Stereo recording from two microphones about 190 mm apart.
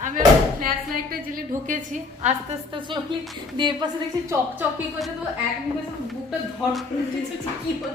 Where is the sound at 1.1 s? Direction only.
45° right (ahead or behind).